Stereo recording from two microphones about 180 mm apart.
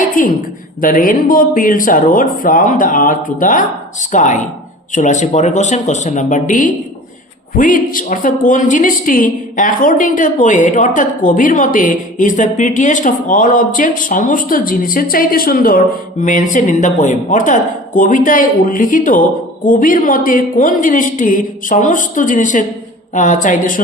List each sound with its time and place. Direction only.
0.2 s a woman's voice: 50° left (ahead or behind)